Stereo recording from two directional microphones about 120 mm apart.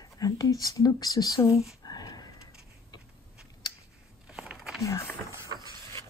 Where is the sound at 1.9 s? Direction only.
35° left (ahead or behind).